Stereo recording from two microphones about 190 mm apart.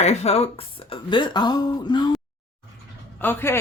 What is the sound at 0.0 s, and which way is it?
Speech, 35° left (ahead or behind).